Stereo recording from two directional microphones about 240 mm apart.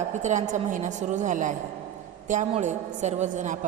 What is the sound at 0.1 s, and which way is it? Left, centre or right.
A woman's voice, right.